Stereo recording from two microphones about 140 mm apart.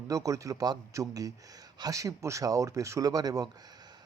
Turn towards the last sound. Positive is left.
turn(degrees=-30)  # may be behind; listen again after turning